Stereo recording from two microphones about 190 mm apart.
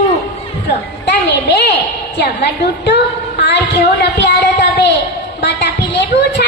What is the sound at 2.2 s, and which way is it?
Speech, 65° left (ahead or behind).